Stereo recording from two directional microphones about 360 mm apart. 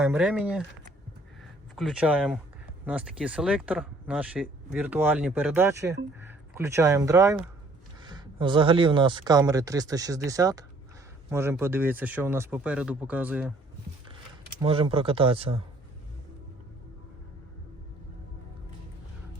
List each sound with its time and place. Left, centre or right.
0.0 s speech: centre
1.7 s speech: centre
14.6 s speech: centre